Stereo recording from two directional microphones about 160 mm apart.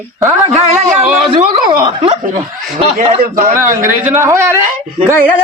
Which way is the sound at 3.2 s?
65° right (ahead or behind).